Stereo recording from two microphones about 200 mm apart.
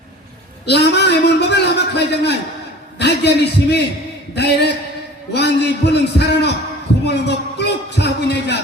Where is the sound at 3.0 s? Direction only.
55° left (ahead or behind).